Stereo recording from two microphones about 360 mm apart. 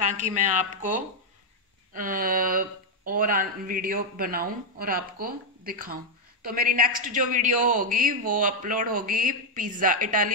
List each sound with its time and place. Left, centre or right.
0.0 s a man's voice: right